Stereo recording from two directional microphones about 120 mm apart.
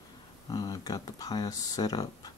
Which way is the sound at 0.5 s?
30° left (ahead or behind).